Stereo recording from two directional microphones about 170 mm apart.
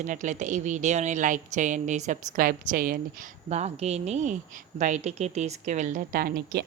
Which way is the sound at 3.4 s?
40° right (ahead or behind).